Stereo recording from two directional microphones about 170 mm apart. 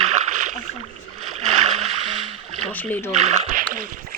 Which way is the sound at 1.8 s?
35° right (ahead or behind).